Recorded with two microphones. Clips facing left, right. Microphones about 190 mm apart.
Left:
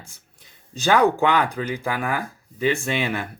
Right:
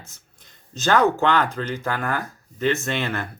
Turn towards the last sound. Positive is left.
turn(degrees=10)  # may be behind; listen again after turning